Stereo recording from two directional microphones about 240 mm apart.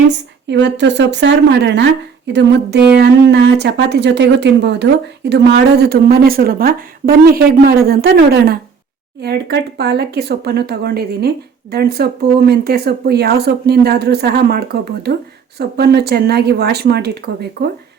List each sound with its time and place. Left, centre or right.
0.1 s a woman's voice: right